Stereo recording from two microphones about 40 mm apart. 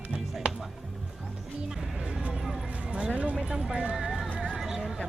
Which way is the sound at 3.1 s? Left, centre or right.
Right.